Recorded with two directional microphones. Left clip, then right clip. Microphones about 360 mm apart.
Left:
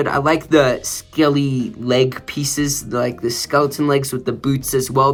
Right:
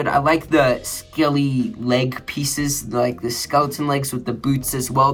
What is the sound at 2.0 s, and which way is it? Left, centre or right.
Speech, right.